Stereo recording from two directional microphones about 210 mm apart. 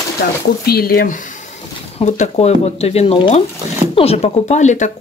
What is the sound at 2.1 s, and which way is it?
Speech, 35° left (ahead or behind).